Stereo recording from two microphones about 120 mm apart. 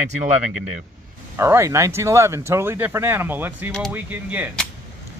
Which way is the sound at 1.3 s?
25° right (ahead or behind).